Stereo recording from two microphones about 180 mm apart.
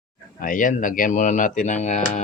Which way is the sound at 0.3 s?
50° left (ahead or behind).